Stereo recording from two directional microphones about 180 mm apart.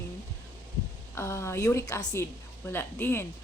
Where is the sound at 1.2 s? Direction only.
15° left (ahead or behind).